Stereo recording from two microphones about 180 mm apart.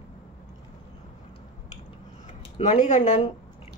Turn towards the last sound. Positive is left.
turn(degrees=40)  # may be behind; listen again after turning